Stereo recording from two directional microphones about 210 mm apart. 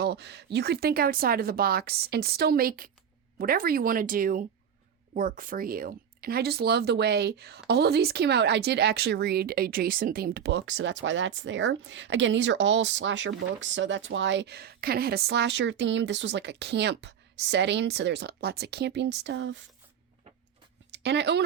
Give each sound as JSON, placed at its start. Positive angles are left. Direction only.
{"t": 0.0, "sound": "speech", "side_deg": -50}
{"t": 20.9, "sound": "speech", "side_deg": -55}